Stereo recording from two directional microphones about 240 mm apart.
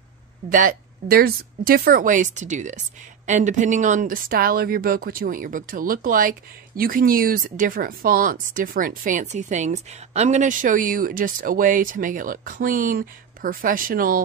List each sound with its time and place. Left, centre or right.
0.5 s speech: right